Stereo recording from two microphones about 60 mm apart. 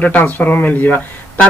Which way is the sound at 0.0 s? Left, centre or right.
Left.